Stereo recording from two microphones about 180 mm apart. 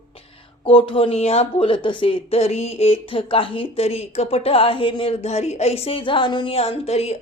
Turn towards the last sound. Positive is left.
turn(degrees=35)  # may be behind; listen again after turning